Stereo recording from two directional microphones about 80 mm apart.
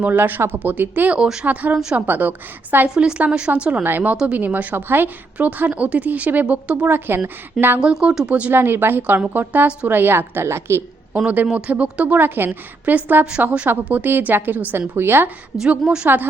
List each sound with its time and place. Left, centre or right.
0.0 s a woman's voice: right
1.2 s a woman's voice: centre
1.5 s a woman's voice: right
7.8 s a woman's voice: centre
8.5 s a woman's voice: right
11.5 s a woman's voice: centre
15.8 s a woman's voice: centre